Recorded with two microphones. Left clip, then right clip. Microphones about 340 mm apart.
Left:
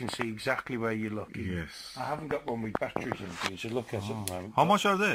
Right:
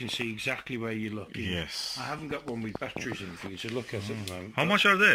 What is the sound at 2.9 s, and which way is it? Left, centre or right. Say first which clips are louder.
Speech: left 2 dB; left.